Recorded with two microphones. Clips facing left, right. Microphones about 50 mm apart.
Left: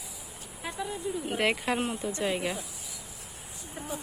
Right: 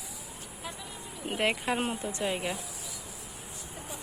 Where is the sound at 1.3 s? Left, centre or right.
Centre.